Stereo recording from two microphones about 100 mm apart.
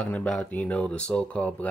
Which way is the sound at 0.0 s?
15° left (ahead or behind).